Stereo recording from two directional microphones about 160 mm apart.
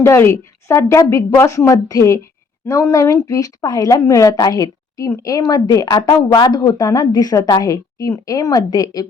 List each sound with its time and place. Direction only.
0.0 s a woman's voice: 15° left (ahead or behind)